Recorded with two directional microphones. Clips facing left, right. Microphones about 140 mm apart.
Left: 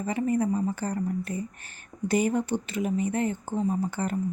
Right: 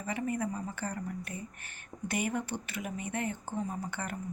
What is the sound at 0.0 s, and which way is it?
Speech, 30° left (ahead or behind).